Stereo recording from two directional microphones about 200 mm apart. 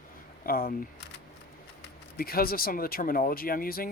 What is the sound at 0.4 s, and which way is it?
Speech, 45° left (ahead or behind).